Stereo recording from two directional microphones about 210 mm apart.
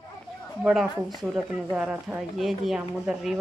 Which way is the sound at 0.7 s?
Centre (ahead or behind).